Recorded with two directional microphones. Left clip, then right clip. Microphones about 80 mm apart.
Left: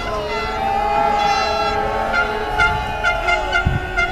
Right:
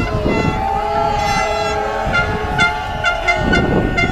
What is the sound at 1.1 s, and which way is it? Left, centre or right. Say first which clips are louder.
Vehicle: even; right.